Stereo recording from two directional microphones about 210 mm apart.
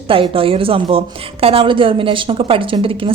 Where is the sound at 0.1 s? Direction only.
25° right (ahead or behind).